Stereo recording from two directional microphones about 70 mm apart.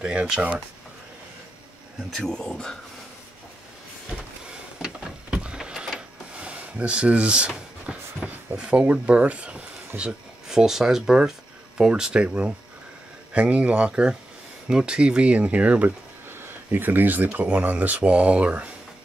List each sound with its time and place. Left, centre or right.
0.0 s speech: centre
2.1 s speech: centre
4.1 s a sound: centre
8.5 s speech: centre